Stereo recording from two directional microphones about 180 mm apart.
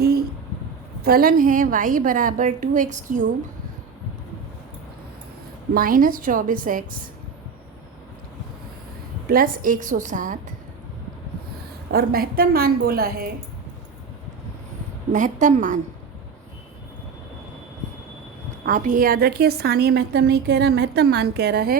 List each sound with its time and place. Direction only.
0.0 s a sound: 60° right (ahead or behind)
1.0 s a woman's voice: 55° right (ahead or behind)
5.7 s a woman's voice: 50° right (ahead or behind)
9.3 s a woman's voice: 50° right (ahead or behind)
11.9 s a woman's voice: 55° right (ahead or behind)
15.1 s a woman's voice: 45° right (ahead or behind)
18.6 s a woman's voice: 45° right (ahead or behind)